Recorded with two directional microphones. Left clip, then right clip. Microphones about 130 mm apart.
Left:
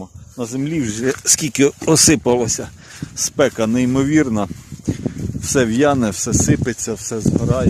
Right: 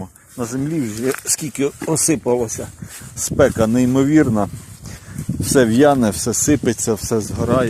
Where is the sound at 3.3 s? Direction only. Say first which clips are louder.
Right 2 dB; 10° left (ahead or behind).